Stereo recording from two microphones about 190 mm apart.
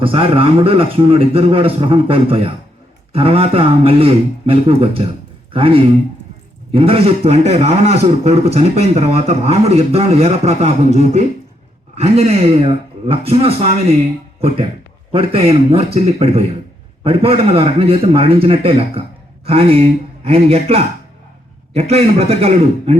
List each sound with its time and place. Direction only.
0.0 s a man's voice: 30° right (ahead or behind)